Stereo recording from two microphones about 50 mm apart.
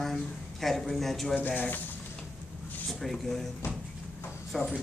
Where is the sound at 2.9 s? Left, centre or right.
Centre.